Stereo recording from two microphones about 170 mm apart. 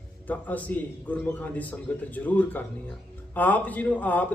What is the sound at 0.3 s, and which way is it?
Speech, 10° left (ahead or behind).